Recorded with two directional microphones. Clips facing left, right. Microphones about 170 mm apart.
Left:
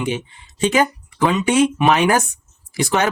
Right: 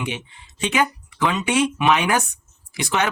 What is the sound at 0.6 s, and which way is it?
Speech, 35° left (ahead or behind).